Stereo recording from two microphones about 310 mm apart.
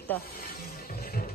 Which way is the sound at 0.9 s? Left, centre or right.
Left.